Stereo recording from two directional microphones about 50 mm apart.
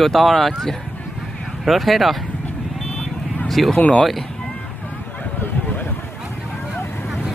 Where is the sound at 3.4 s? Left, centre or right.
Centre.